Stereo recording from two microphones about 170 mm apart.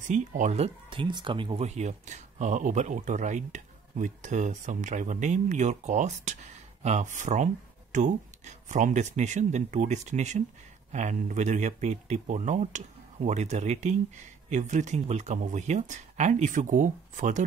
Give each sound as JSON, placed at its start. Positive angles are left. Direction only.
{"t": 0.0, "sound": "speech", "side_deg": -45}
{"t": 0.8, "sound": "speech", "side_deg": -30}
{"t": 1.7, "sound": "speech", "side_deg": -40}